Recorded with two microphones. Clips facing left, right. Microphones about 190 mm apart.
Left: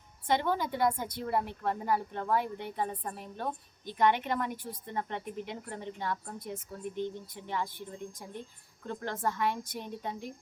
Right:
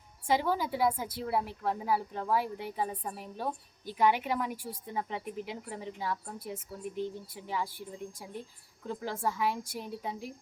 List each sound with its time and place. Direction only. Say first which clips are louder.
0.3 s a woman's voice: even; 5° right (ahead or behind)